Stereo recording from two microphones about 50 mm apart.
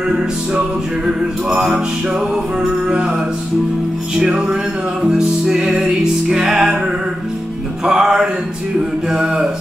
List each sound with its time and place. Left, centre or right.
0.1 s music: centre
4.2 s music: centre
7.8 s music: centre